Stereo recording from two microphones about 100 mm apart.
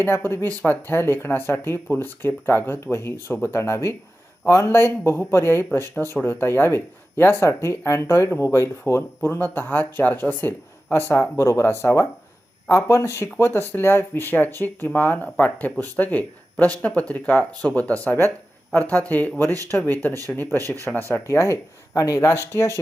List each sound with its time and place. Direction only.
0.0 s speech: 25° left (ahead or behind)
20.6 s speech: 35° right (ahead or behind)
21.1 s speech: 30° left (ahead or behind)